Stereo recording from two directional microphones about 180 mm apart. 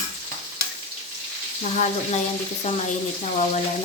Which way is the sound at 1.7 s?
45° left (ahead or behind).